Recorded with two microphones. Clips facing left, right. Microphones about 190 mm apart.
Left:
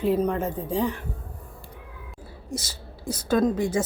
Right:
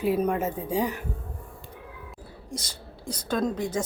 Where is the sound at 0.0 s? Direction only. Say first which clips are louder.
Left 1 dB; 10° right (ahead or behind).